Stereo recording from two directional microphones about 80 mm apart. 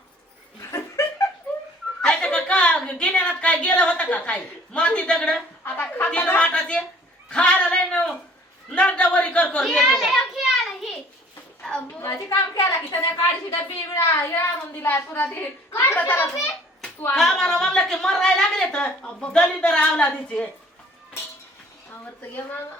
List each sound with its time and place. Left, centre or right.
0.7 s laughter: left
2.0 s a woman's voice: centre
5.6 s a child's voice: left
7.3 s a sound: centre
8.7 s a woman's voice: centre
9.6 s a sound: centre
12.0 s a woman's voice: left
17.2 s a woman's voice: centre
22.2 s a child's voice: left